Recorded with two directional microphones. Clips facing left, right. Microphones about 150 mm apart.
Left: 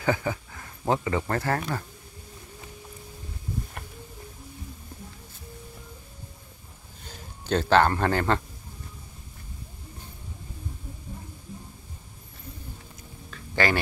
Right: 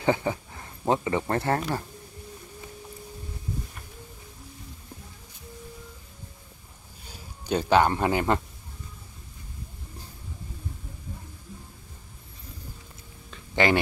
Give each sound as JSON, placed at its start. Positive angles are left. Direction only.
{"t": 0.0, "sound": "speech", "side_deg": -25}
{"t": 7.1, "sound": "speech", "side_deg": -10}
{"t": 13.3, "sound": "a sound", "side_deg": -20}